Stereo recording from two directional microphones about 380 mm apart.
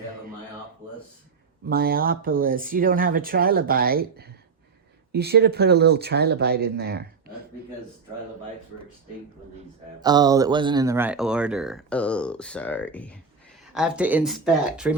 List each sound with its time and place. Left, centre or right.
1.6 s speech: right
10.0 s speech: centre